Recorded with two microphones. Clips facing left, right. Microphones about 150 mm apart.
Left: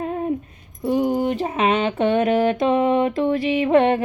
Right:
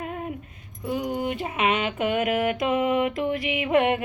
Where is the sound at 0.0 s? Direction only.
30° left (ahead or behind).